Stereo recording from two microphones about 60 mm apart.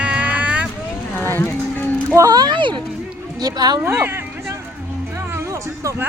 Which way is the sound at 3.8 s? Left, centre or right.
Right.